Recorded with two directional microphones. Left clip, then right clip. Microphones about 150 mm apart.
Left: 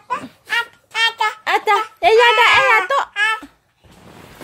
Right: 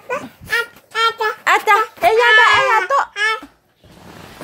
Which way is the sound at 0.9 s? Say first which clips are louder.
Even; 25° left (ahead or behind).